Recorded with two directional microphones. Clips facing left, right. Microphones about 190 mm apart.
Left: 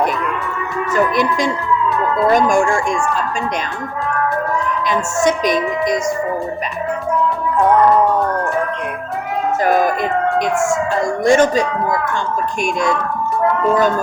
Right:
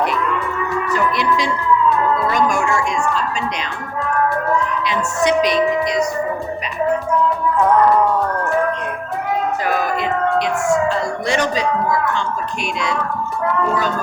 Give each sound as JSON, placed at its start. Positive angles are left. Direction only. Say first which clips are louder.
{"t": 0.9, "sound": "music", "louder": "left 4 dB", "side_deg": 45}
{"t": 2.3, "sound": "a woman's voice", "louder": "left 4 dB", "side_deg": 50}
{"t": 4.8, "sound": "a woman's voice", "louder": "left 2 dB", "side_deg": 45}
{"t": 9.6, "sound": "a woman's voice", "louder": "left 4 dB", "side_deg": 45}
{"t": 11.3, "sound": "a woman's voice", "louder": "left 7 dB", "side_deg": 50}